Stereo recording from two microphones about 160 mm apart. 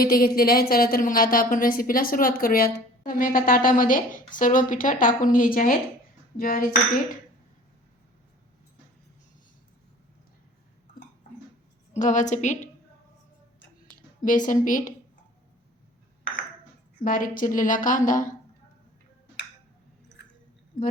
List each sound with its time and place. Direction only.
0.0 s a woman's voice: 65° left (ahead or behind)
11.9 s a woman's voice: 50° left (ahead or behind)
14.2 s a woman's voice: 55° left (ahead or behind)
17.0 s a woman's voice: 60° left (ahead or behind)